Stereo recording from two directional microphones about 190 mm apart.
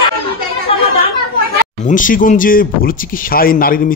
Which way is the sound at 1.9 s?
45° left (ahead or behind).